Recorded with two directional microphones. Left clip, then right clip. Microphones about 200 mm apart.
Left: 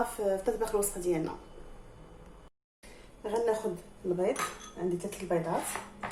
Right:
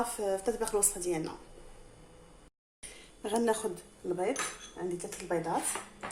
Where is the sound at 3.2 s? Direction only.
45° right (ahead or behind).